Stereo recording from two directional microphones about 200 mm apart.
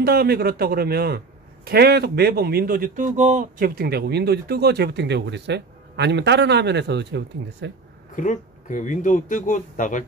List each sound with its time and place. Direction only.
0.0 s a man's voice: 50° right (ahead or behind)
8.2 s speech: 40° left (ahead or behind)